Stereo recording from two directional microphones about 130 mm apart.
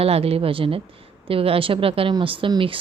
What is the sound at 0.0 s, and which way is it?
A woman's voice, 50° right (ahead or behind).